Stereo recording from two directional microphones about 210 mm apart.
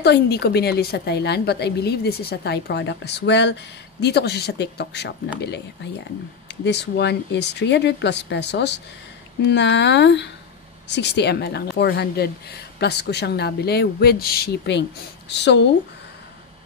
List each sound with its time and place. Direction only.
0.0 s a woman's voice: 50° left (ahead or behind)
6.5 s a woman's voice: 55° left (ahead or behind)